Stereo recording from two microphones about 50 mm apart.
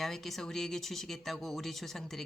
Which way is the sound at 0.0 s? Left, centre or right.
Centre.